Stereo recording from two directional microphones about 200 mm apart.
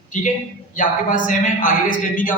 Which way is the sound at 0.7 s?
40° left (ahead or behind).